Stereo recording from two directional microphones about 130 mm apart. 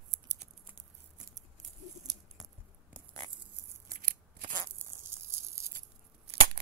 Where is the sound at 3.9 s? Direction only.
80° right.